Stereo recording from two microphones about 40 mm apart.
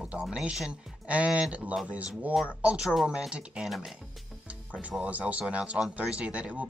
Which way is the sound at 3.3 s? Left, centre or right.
Right.